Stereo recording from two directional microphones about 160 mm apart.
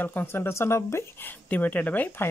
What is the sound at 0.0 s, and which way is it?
Speech, 10° left (ahead or behind).